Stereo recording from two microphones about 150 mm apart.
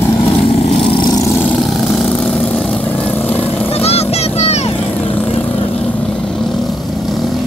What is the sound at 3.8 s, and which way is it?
Vehicle, 45° left (ahead or behind).